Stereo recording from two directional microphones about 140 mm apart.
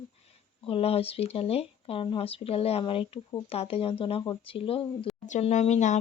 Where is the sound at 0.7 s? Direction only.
45° left (ahead or behind).